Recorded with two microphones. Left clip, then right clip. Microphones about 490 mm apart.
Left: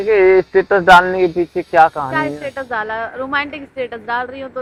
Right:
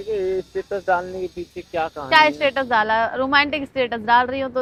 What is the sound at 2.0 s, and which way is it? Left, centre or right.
A woman's voice, right.